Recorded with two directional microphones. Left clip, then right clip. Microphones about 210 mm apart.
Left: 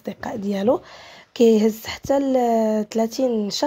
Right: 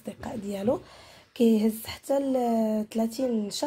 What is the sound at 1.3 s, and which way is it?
Speech, 25° left (ahead or behind).